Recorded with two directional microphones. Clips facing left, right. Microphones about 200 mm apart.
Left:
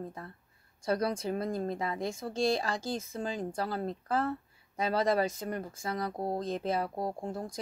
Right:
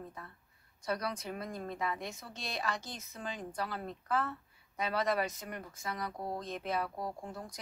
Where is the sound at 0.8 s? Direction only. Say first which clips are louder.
Left 7 dB; 30° left (ahead or behind).